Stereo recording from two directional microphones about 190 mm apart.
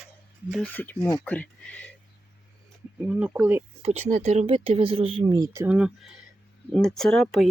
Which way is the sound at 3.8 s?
40° right (ahead or behind).